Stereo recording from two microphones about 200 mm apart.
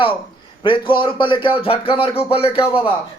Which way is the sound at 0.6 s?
25° left (ahead or behind).